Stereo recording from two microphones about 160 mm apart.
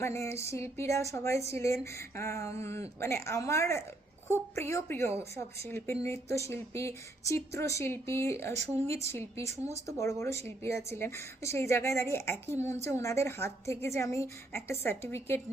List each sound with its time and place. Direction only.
0.0 s a woman's voice: 15° left (ahead or behind)